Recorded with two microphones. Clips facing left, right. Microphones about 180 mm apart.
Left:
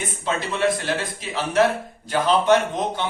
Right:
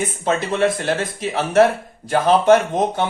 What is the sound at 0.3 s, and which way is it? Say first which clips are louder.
Speech: right 3 dB; 50° right (ahead or behind).